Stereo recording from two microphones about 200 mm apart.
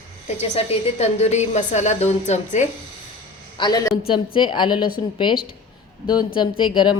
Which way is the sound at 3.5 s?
20° left (ahead or behind).